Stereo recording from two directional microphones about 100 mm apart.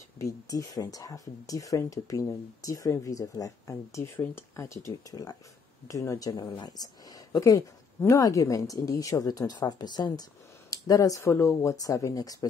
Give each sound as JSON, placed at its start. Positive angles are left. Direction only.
{"t": 0.2, "sound": "speech", "side_deg": 35}
{"t": 5.1, "sound": "speech", "side_deg": 40}
{"t": 10.7, "sound": "speech", "side_deg": 35}